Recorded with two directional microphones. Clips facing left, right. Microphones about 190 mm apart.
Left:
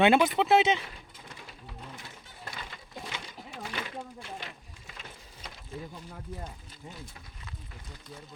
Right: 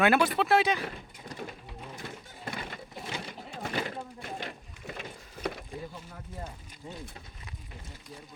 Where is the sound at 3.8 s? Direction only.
50° right (ahead or behind).